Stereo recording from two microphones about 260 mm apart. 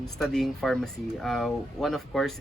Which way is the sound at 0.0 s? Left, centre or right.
Centre.